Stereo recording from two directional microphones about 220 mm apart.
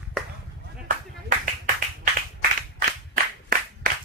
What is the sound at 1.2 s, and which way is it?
Clapping, 40° right (ahead or behind).